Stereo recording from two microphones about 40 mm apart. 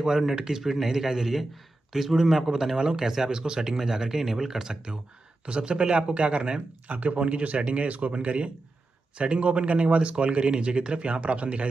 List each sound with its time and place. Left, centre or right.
0.0 s speech: centre; by 11.6 s right